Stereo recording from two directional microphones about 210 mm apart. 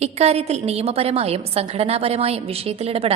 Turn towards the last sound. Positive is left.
turn(degrees=-30)  # may be behind; listen again after turning